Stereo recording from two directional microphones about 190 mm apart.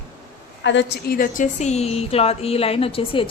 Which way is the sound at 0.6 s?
70° left (ahead or behind).